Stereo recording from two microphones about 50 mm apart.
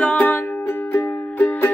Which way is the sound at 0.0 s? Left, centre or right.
Left.